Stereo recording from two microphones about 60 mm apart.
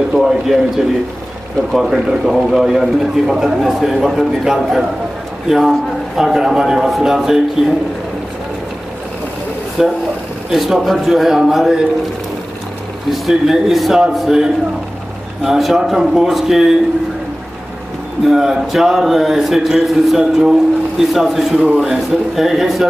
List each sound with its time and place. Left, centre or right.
0.1 s a man's voice: centre
1.8 s a man's voice: centre
9.8 s a man's voice: centre
13.1 s a man's voice: centre
18.2 s a man's voice: centre
21.5 s a man's voice: right
21.8 s a man's voice: centre